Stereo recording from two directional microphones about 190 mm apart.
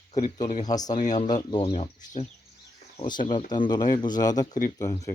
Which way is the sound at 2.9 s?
25° left (ahead or behind).